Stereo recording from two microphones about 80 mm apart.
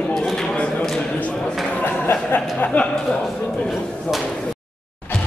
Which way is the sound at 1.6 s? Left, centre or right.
Left.